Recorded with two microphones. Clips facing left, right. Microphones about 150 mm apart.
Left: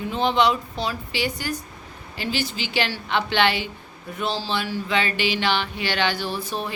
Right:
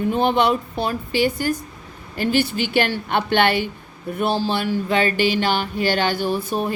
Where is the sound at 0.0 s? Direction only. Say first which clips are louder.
Right 3 dB; 50° right (ahead or behind).